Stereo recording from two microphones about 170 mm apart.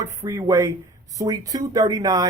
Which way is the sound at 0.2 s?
20° right (ahead or behind).